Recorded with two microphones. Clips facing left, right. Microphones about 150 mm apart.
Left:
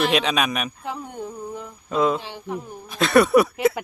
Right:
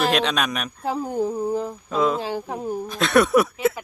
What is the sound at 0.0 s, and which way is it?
Speech, centre (ahead or behind).